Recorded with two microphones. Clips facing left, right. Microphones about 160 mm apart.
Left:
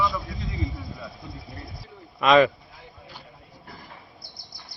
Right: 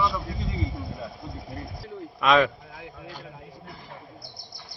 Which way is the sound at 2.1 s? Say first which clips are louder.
Left 3 dB; centre (ahead or behind).